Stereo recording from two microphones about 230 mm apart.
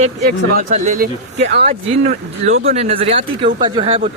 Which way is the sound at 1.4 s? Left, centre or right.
Right.